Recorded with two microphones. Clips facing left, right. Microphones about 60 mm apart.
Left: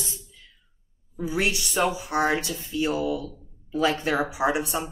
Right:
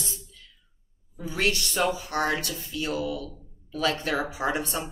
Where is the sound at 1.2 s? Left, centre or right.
Centre.